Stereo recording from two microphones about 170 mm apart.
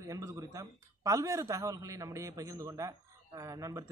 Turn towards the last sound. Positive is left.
turn(degrees=-20)  # may be behind; listen again after turning